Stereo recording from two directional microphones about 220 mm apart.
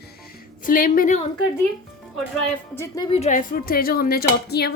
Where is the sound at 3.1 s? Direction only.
30° left (ahead or behind).